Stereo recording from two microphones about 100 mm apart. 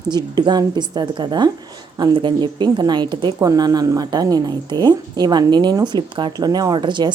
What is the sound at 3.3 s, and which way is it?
Speech, 35° right (ahead or behind).